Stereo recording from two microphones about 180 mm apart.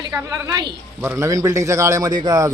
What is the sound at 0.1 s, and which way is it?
A woman's voice, 15° right (ahead or behind).